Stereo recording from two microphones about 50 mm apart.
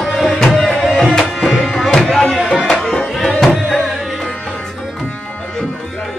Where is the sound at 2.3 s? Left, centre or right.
Centre.